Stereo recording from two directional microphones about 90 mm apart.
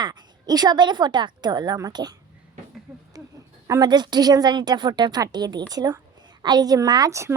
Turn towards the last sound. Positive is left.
turn(degrees=-35)  # may be behind; listen again after turning